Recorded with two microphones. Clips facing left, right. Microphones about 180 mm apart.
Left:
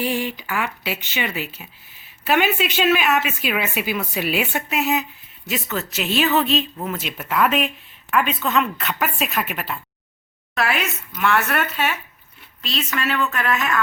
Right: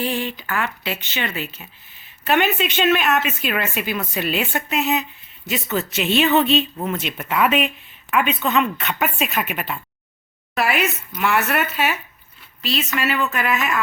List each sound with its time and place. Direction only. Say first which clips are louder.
0.0 s a woman's voice: left 1 dB; 10° left (ahead or behind); by 13.7 s 5° right (ahead or behind)